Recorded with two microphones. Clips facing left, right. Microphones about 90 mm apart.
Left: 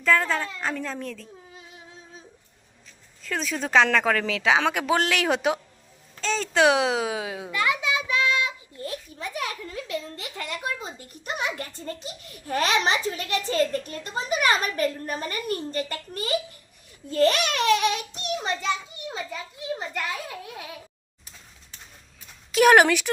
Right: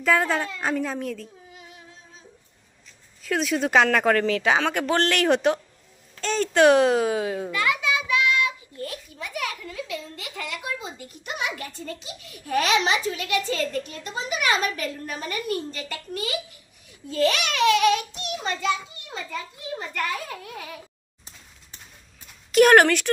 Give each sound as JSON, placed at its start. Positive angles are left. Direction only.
{"t": 0.0, "sound": "a woman's voice", "side_deg": -10}
{"t": 0.7, "sound": "speech", "side_deg": -5}
{"t": 3.2, "sound": "a woman's voice", "side_deg": -5}
{"t": 7.6, "sound": "a sound", "side_deg": 25}
{"t": 10.2, "sound": "speech", "side_deg": 35}
{"t": 18.6, "sound": "a child's voice", "side_deg": 25}
{"t": 22.5, "sound": "speech", "side_deg": 5}